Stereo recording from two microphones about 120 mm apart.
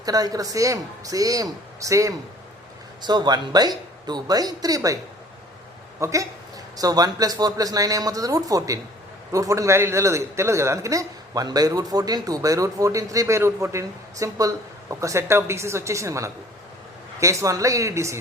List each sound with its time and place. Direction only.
0.0 s a man's voice: 30° right (ahead or behind)
3.0 s speech: 35° right (ahead or behind)
6.0 s a man's voice: 25° right (ahead or behind)